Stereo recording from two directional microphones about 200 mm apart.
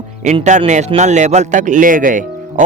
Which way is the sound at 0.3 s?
35° right (ahead or behind).